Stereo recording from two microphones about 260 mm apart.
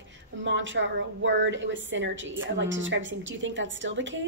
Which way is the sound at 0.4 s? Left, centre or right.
Right.